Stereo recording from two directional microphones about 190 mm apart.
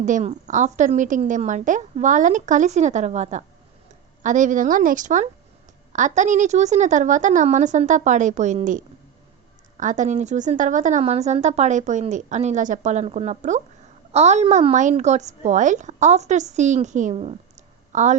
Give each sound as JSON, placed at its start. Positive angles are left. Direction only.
{"t": 0.0, "sound": "a woman's voice", "side_deg": -40}